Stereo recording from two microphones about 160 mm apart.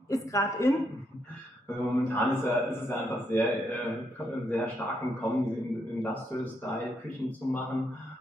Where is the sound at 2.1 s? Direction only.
15° left (ahead or behind).